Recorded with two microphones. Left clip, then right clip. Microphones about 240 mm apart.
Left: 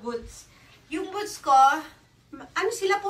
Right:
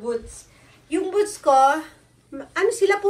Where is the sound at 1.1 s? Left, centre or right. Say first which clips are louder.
Right 4 dB; centre.